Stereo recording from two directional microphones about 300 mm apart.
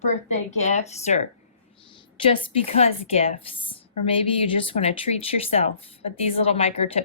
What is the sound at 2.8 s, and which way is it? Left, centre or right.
Speech, centre.